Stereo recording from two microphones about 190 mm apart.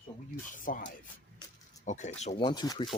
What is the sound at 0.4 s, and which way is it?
Speech, 45° left (ahead or behind).